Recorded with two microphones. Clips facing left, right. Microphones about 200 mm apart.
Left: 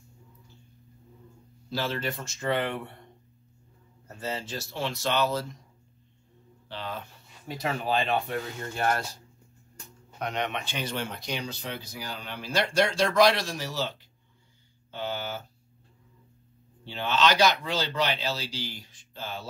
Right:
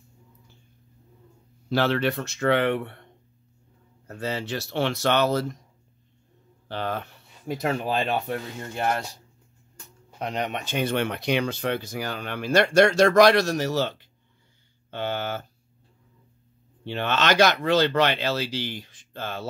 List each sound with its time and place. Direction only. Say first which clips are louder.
1.7 s speech: right 8 dB; 65° right (ahead or behind)
4.1 s speech: right 5 dB; 65° right (ahead or behind)
6.7 s speech: right 7 dB; 60° right (ahead or behind)
8.7 s speech: right 1 dB; 20° right (ahead or behind)
10.1 s speech: right 2 dB; 35° right (ahead or behind); by 13.9 s 50° right (ahead or behind)
14.9 s a sound: right 5 dB; 65° right (ahead or behind)
16.8 s speech: right 1 dB; 60° right (ahead or behind)